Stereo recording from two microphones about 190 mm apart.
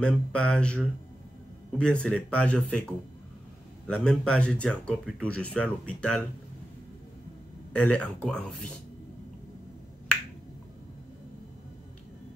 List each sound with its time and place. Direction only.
0.0 s speech: 5° left (ahead or behind)
3.8 s speech: 5° left (ahead or behind)
7.7 s speech: 5° left (ahead or behind)